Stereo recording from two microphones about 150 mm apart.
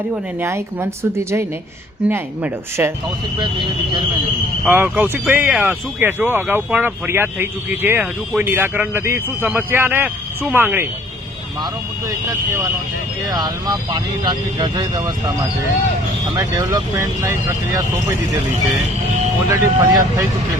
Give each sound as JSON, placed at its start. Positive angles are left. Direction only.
{"t": 0.4, "sound": "speech", "side_deg": -20}
{"t": 3.3, "sound": "speech", "side_deg": -30}
{"t": 4.6, "sound": "speech", "side_deg": -15}
{"t": 13.3, "sound": "speech", "side_deg": -25}
{"t": 16.3, "sound": "speech", "side_deg": -25}
{"t": 19.5, "sound": "speech", "side_deg": -20}